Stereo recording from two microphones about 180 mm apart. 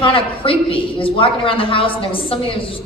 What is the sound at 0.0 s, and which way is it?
A woman's voice, 30° left (ahead or behind).